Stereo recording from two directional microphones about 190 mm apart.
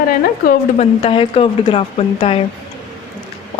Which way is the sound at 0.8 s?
30° left (ahead or behind).